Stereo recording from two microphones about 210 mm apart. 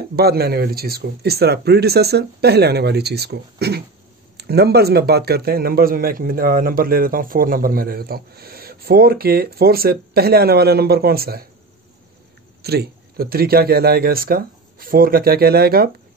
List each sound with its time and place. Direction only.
0.1 s a man's voice: 50° right (ahead or behind)
12.6 s a man's voice: 50° right (ahead or behind)